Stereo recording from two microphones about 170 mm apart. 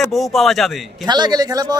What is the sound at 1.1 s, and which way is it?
Speech, 25° right (ahead or behind).